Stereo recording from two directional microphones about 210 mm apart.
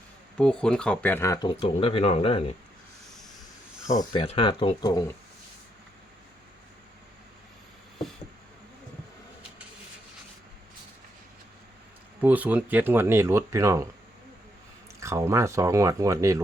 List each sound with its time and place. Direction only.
0.3 s speech: 5° left (ahead or behind); by 2.6 s 25° left (ahead or behind)
3.8 s speech: 20° left (ahead or behind)
12.2 s speech: 5° right (ahead or behind)
15.0 s speech: 15° right (ahead or behind)